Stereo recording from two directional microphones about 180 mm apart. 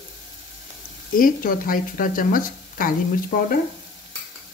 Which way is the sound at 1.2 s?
50° left (ahead or behind).